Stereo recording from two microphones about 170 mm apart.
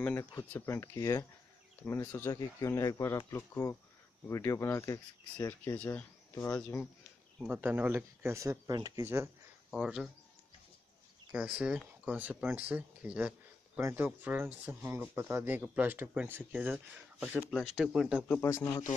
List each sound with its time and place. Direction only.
0.0 s speech: 15° left (ahead or behind)
7.4 s speech: 10° right (ahead or behind)
9.7 s speech: 5° right (ahead or behind)
11.3 s speech: 5° right (ahead or behind)
18.4 s speech: 15° left (ahead or behind)